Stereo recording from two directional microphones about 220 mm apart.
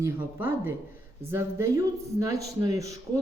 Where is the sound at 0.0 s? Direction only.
10° right (ahead or behind).